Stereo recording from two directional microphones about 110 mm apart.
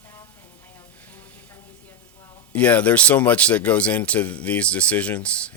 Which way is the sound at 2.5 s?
15° left (ahead or behind).